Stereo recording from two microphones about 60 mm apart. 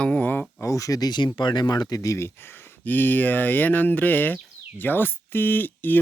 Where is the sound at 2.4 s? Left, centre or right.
Left.